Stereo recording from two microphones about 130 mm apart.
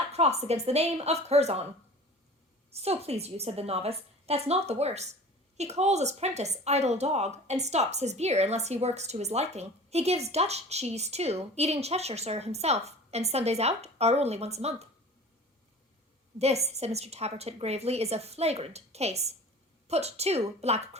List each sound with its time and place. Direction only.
0.1 s a woman's voice: 55° right (ahead or behind)
2.7 s a woman's voice: 50° right (ahead or behind)
16.4 s a woman's voice: 55° right (ahead or behind)